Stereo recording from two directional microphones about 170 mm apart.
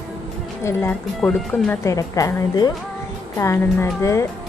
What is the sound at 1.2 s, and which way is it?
Speech, 5° left (ahead or behind).